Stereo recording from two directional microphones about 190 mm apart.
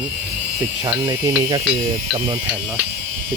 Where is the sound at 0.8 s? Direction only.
20° right (ahead or behind).